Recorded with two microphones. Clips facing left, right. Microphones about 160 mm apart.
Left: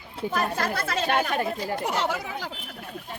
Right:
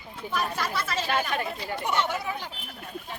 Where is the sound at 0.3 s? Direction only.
50° left (ahead or behind).